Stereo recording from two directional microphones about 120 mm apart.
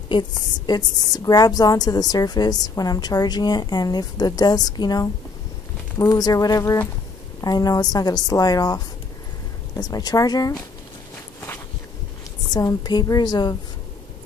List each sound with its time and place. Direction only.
0.1 s a woman's voice: 35° left (ahead or behind)
12.4 s a woman's voice: 35° left (ahead or behind)